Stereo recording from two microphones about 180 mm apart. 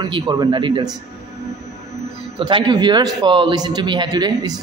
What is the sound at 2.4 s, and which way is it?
Speech, 25° right (ahead or behind).